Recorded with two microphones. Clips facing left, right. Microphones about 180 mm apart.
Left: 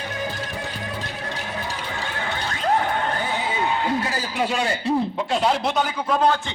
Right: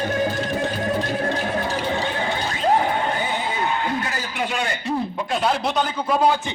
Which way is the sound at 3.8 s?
30° left (ahead or behind).